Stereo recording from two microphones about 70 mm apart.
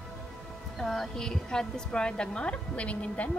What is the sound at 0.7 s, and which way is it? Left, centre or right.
A woman's voice, centre.